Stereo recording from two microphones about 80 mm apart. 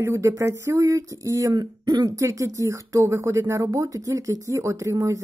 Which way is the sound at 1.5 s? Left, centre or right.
Right.